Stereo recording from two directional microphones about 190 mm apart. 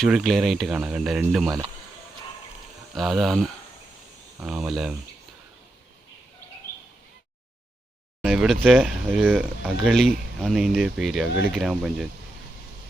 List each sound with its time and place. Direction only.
0.0 s speech: centre (ahead or behind)
1.5 s speech: 15° right (ahead or behind)
3.0 s speech: centre (ahead or behind)
8.2 s speech: centre (ahead or behind)